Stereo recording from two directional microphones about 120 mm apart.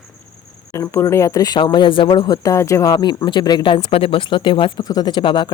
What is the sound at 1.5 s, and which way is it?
Speech, 40° left (ahead or behind).